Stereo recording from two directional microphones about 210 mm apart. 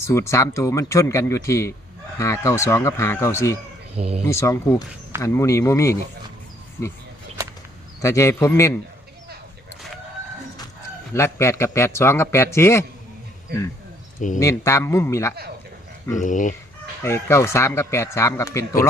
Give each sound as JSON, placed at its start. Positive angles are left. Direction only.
{"t": 0.1, "sound": "speech", "side_deg": 15}
{"t": 3.9, "sound": "speech", "side_deg": -30}
{"t": 4.3, "sound": "speech", "side_deg": 15}
{"t": 8.0, "sound": "speech", "side_deg": 15}
{"t": 11.1, "sound": "speech", "side_deg": 15}
{"t": 14.3, "sound": "speech", "side_deg": 15}
{"t": 16.1, "sound": "speech", "side_deg": 35}
{"t": 17.0, "sound": "speech", "side_deg": 10}